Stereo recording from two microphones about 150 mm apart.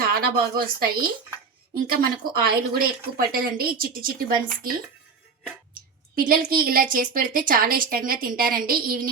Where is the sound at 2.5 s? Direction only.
80° right.